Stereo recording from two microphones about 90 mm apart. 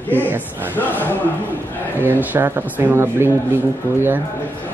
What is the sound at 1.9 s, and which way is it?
A man's voice, 20° right (ahead or behind).